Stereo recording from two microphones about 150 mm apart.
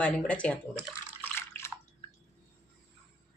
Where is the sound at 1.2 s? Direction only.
15° left (ahead or behind).